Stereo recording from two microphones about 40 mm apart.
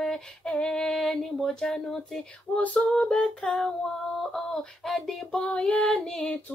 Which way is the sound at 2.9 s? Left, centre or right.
Centre.